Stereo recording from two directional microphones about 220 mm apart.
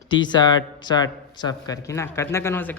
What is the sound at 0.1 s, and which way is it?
A woman's voice, 20° left (ahead or behind).